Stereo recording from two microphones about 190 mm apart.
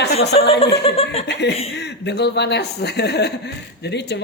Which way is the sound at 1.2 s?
65° left (ahead or behind).